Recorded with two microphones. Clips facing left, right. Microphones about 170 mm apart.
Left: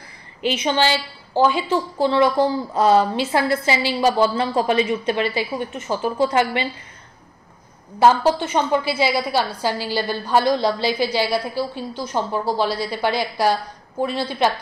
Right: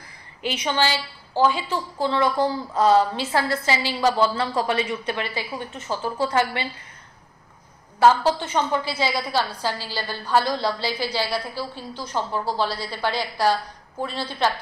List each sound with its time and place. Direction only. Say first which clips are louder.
0.4 s a woman's voice: left 4 dB; 20° left (ahead or behind)
8.0 s a woman's voice: left 2 dB; 15° left (ahead or behind)